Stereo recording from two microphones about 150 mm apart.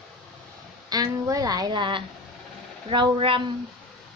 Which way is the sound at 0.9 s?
25° right (ahead or behind).